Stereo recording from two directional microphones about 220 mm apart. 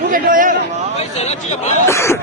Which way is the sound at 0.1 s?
40° right (ahead or behind).